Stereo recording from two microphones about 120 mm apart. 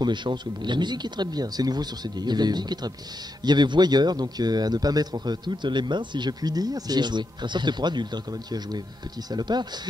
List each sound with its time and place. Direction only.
0.0 s speech: 40° right (ahead or behind)